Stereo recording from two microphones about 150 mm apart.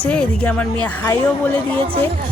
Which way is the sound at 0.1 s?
5° left (ahead or behind).